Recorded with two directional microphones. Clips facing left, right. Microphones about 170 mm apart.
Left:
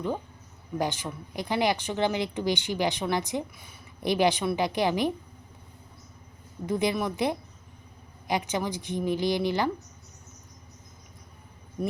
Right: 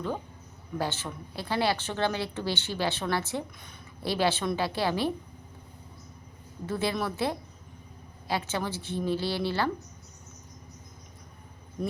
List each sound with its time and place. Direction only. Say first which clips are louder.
0.8 s a woman's voice: left 2 dB; 15° left (ahead or behind)
6.7 s a woman's voice: left 3 dB; 15° left (ahead or behind)